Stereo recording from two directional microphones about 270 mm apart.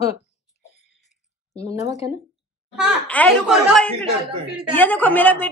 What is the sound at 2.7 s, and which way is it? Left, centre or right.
A woman's voice, centre.